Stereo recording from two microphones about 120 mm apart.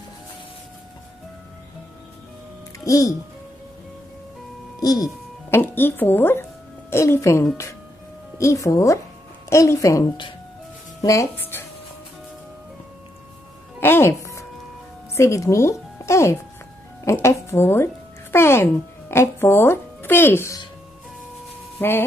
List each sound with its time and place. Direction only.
2.8 s speech: 30° left (ahead or behind)
4.7 s speech: 30° left (ahead or behind)
5.5 s speech: 20° left (ahead or behind)
13.7 s music: 20° left (ahead or behind)
15.1 s speech: 25° left (ahead or behind)